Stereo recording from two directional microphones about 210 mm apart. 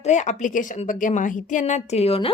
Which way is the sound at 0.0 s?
35° left (ahead or behind).